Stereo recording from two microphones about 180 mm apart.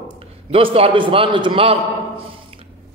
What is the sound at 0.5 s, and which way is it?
A man's voice, 30° right (ahead or behind).